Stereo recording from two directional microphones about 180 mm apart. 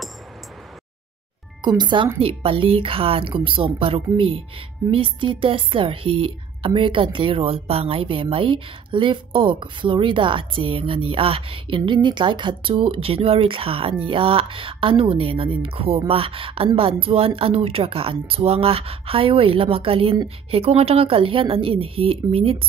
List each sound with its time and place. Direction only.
1.6 s a woman's voice: 25° right (ahead or behind)